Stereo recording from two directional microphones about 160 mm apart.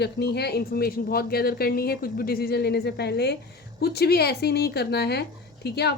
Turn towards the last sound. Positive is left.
turn(degrees=90)